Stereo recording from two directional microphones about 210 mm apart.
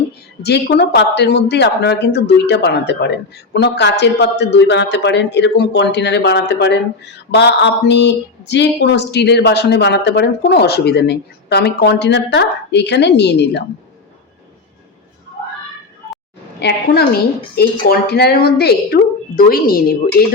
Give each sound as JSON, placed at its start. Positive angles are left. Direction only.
{"t": 0.4, "sound": "a man's voice", "side_deg": 50}
{"t": 16.6, "sound": "speech", "side_deg": 50}